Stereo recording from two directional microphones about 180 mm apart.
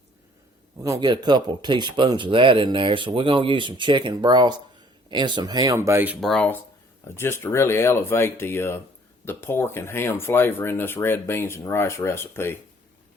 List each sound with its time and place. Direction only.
0.8 s speech: 20° right (ahead or behind); by 12.5 s 15° left (ahead or behind)